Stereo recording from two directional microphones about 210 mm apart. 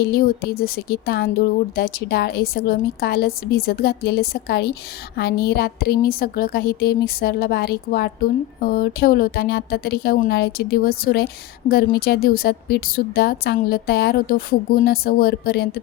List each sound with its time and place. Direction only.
0.1 s a woman's voice: 45° left (ahead or behind)